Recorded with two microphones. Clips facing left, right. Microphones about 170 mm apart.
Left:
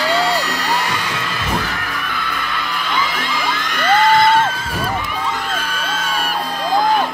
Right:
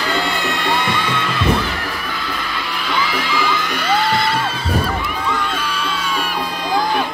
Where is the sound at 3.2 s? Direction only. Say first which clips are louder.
Right 3 dB; 50° left (ahead or behind).